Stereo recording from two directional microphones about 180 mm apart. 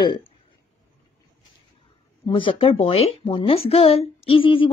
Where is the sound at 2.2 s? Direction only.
30° left (ahead or behind).